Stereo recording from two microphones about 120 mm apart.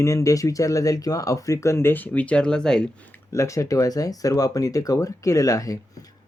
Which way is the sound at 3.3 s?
25° left (ahead or behind).